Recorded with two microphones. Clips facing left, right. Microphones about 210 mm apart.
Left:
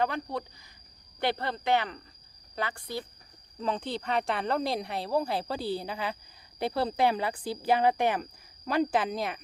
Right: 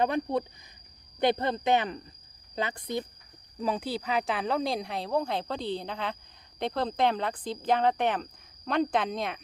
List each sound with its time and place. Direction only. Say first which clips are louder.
0.0 s speech: right 4 dB; 20° right (ahead or behind)
3.6 s speech: right 1 dB; 10° right (ahead or behind)